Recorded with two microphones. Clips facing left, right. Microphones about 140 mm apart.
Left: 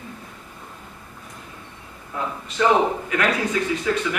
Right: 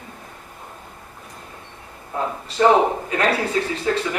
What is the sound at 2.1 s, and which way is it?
Speech, 35° right (ahead or behind).